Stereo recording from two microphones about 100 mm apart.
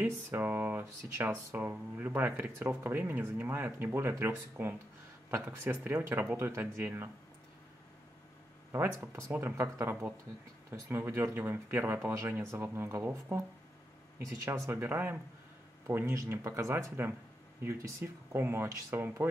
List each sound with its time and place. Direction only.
0.0 s speech: 20° right (ahead or behind)
8.7 s speech: 20° right (ahead or behind)